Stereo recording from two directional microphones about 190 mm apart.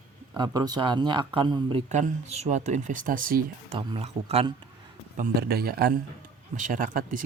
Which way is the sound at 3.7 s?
30° right (ahead or behind).